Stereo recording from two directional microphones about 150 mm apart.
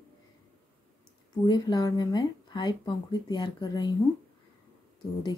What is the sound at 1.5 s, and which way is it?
Speech, 30° left (ahead or behind).